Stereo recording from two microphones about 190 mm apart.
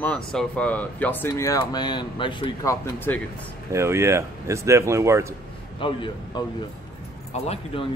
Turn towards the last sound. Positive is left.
turn(degrees=30)  # may be behind; listen again after turning